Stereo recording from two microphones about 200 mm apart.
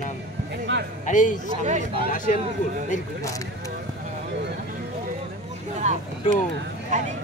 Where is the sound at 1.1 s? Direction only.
40° left (ahead or behind).